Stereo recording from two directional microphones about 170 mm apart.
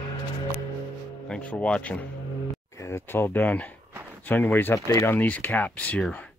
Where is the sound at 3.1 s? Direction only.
10° left (ahead or behind).